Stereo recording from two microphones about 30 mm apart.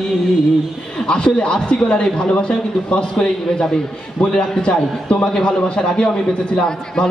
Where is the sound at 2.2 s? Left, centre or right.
Left.